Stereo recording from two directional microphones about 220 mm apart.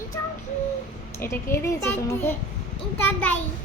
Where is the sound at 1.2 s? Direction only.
10° left (ahead or behind).